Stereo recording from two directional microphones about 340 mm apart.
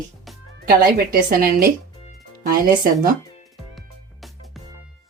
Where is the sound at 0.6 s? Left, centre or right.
Right.